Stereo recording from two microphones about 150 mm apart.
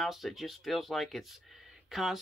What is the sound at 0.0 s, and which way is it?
Speech, centre (ahead or behind).